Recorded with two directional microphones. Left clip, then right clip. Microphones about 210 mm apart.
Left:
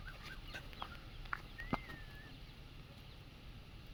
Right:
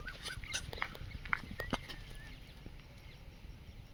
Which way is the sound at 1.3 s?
30° right (ahead or behind).